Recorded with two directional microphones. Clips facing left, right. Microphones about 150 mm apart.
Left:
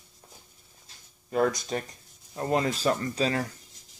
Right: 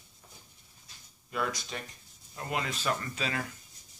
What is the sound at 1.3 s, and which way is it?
Speech, 40° left (ahead or behind).